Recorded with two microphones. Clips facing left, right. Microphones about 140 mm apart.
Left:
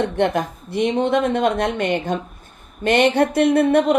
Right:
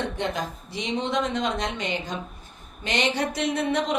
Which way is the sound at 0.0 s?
60° left (ahead or behind).